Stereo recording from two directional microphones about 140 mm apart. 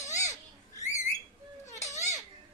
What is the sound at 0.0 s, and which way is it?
Owl, 55° left (ahead or behind).